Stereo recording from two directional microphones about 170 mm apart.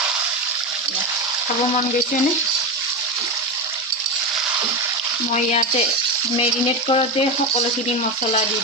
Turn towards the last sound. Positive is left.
turn(degrees=35)  # may be behind; listen again after turning